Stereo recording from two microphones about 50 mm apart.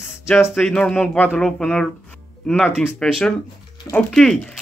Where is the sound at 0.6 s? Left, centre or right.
Left.